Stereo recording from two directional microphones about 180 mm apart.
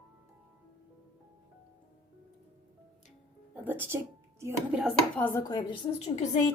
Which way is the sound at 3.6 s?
10° right (ahead or behind).